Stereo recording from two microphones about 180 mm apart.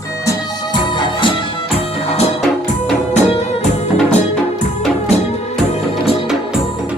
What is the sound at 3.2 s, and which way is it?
Music, 30° left (ahead or behind).